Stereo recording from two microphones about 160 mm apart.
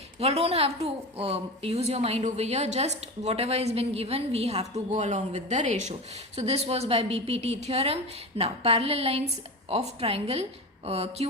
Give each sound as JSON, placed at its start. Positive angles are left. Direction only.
{"t": 0.2, "sound": "a woman's voice", "side_deg": -40}